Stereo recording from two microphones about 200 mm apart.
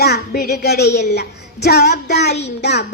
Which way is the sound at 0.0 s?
55° left (ahead or behind).